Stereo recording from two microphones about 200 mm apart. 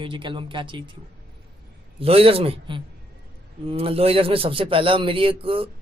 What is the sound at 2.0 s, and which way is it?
A man's voice, 30° right (ahead or behind).